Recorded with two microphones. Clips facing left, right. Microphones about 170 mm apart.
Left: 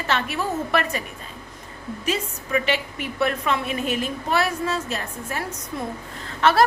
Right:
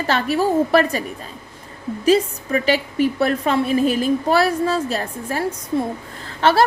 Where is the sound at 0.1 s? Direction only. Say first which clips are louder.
Right 7 dB; 35° right (ahead or behind).